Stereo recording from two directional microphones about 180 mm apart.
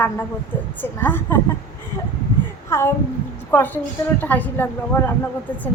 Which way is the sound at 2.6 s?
15° left (ahead or behind).